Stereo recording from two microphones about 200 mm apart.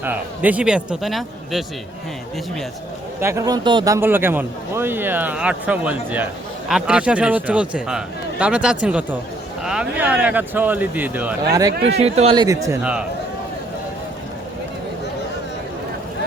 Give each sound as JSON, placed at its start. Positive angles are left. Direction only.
{"t": 0.0, "sound": "a man's voice", "side_deg": -10}
{"t": 3.2, "sound": "a man's voice", "side_deg": -15}
{"t": 11.9, "sound": "speech", "side_deg": -30}
{"t": 12.8, "sound": "a man's voice", "side_deg": -5}